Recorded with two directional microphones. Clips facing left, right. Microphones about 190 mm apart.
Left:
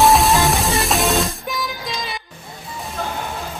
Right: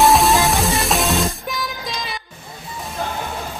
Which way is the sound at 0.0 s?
Centre (ahead or behind).